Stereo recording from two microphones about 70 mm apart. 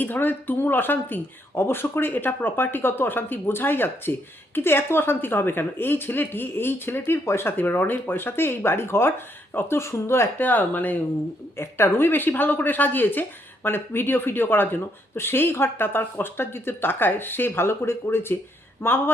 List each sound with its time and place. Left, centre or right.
0.0 s speech: left
11.5 s speech: left